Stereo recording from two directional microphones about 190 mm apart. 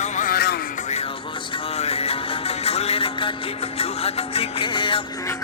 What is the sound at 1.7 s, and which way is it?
Music, 35° left (ahead or behind).